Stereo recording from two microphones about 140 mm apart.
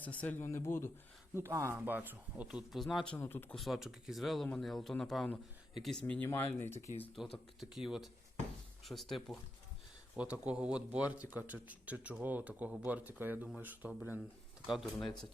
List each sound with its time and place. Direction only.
0.0 s speech: 10° left (ahead or behind)
1.4 s speech: 20° right (ahead or behind); by 3.1 s centre (ahead or behind)
3.2 s speech: 15° left (ahead or behind)
3.5 s speech: centre (ahead or behind)
7.6 s speech: centre (ahead or behind)